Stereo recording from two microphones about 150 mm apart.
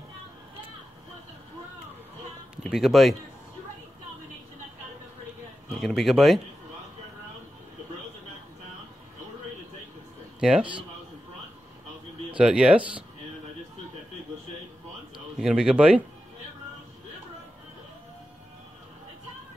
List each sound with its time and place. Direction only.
2.5 s speech: 5° right (ahead or behind)
5.8 s speech: centre (ahead or behind)
10.4 s speech: 5° right (ahead or behind)
12.4 s speech: 5° right (ahead or behind)
15.3 s speech: 5° right (ahead or behind)